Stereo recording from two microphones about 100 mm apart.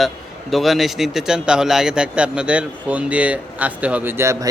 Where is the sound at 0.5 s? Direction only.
Centre (ahead or behind).